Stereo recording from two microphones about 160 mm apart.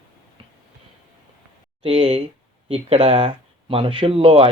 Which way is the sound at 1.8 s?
35° right (ahead or behind).